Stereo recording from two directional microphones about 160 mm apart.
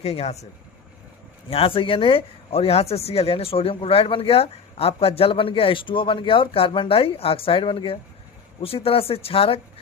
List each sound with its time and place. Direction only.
0.0 s speech: 40° left (ahead or behind)
1.5 s speech: 35° left (ahead or behind)